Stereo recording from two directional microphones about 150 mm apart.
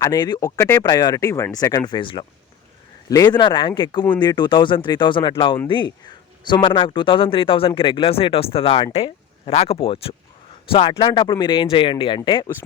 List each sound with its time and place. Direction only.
0.0 s speech: 25° left (ahead or behind)